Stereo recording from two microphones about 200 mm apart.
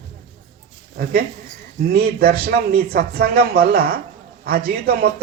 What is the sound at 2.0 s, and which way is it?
Speech, 50° right (ahead or behind).